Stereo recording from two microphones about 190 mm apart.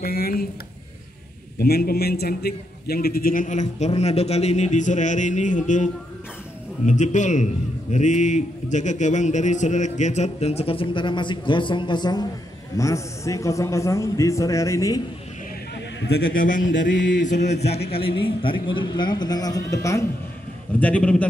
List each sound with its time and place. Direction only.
0.0 s speech: 50° left (ahead or behind)
1.6 s a man's voice: 55° left (ahead or behind)
6.9 s a man's voice: 40° left (ahead or behind); by 15.0 s 15° left (ahead or behind)
16.0 s a man's voice: 70° left (ahead or behind)
16.3 s a man's voice: 45° left (ahead or behind)
16.8 s mantra: 70° left (ahead or behind)
17.3 s a man's voice: 35° left (ahead or behind); by 21.3 s 5° left (ahead or behind)